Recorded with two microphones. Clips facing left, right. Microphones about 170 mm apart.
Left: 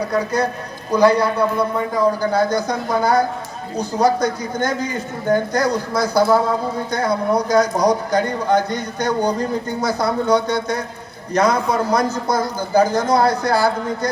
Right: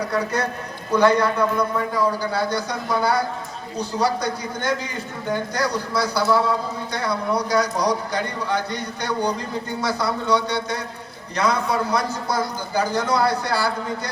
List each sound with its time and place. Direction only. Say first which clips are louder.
0.9 s speech: left 3 dB; 10° left (ahead or behind)
2.0 s speech: left 6 dB; 45° left (ahead or behind)